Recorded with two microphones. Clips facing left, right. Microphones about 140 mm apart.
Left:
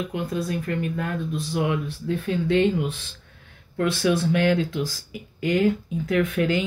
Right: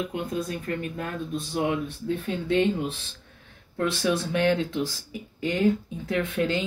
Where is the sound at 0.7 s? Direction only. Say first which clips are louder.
Left 4 dB; 40° right (ahead or behind).